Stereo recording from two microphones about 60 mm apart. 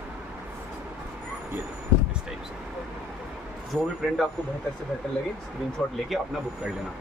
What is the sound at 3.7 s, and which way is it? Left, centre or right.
Speech, centre.